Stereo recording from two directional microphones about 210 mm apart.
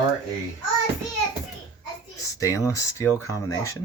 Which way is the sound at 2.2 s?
15° left (ahead or behind).